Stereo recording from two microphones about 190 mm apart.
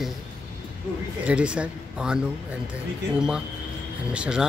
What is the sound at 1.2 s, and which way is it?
Speech, 5° right (ahead or behind).